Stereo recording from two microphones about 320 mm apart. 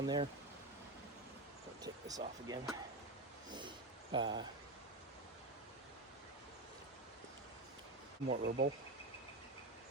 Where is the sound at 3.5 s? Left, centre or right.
Centre.